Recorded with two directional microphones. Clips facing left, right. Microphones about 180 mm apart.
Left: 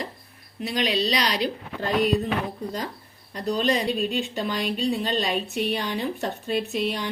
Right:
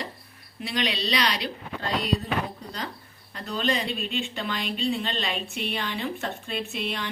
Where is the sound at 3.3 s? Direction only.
40° left (ahead or behind).